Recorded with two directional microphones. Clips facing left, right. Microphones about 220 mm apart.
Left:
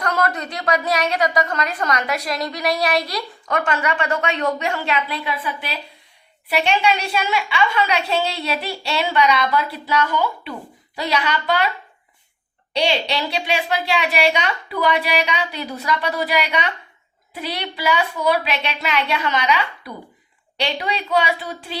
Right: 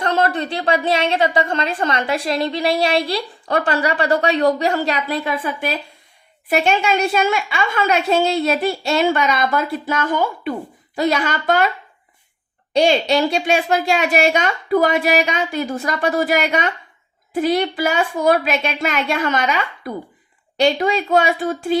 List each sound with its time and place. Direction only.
0.0 s a woman's voice: 25° right (ahead or behind); by 11.7 s 45° right (ahead or behind)
12.7 s a woman's voice: 45° right (ahead or behind)